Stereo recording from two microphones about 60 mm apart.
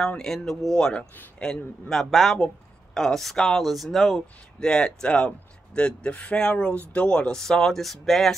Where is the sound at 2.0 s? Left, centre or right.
Centre.